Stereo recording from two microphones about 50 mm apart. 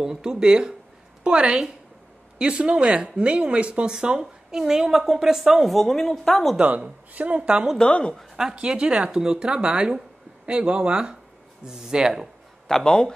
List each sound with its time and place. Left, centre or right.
0.0 s a woman's voice: centre
5.8 s a woman's voice: centre
6.6 s speech: right
7.4 s a woman's voice: centre
7.9 s speech: centre
8.4 s a woman's voice: centre
12.6 s speech: centre